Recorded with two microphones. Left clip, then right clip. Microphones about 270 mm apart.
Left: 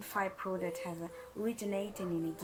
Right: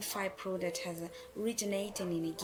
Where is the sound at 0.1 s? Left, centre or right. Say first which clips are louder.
Left 3 dB; centre.